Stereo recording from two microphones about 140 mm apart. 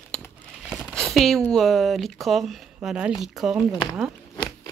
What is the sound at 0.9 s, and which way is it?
Speech, centre (ahead or behind).